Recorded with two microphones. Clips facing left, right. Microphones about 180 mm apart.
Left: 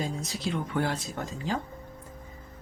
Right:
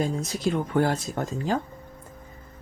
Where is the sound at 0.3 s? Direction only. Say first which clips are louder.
Right 6 dB; 45° right (ahead or behind).